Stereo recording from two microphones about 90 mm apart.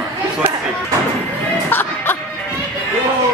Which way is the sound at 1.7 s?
25° left (ahead or behind).